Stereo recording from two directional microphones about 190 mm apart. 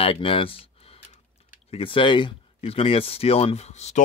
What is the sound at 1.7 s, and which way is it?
Speech, 30° left (ahead or behind).